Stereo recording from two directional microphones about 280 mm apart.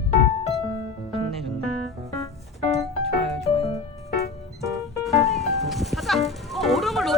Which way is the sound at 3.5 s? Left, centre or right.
Centre.